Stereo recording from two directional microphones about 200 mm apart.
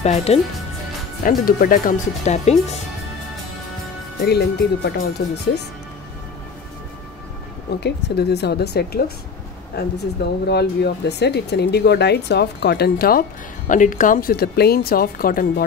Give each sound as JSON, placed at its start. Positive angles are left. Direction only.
{"t": 0.0, "sound": "speech", "side_deg": 30}
{"t": 1.2, "sound": "speech", "side_deg": 45}
{"t": 4.8, "sound": "speech", "side_deg": 55}
{"t": 7.8, "sound": "speech", "side_deg": 55}